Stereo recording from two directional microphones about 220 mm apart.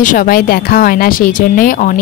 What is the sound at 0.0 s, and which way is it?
A woman's voice, 40° left (ahead or behind).